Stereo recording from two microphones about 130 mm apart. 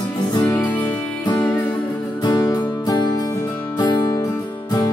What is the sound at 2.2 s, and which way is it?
Music, 30° left (ahead or behind).